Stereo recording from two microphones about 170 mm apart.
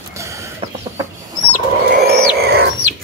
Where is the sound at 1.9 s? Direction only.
70° right (ahead or behind).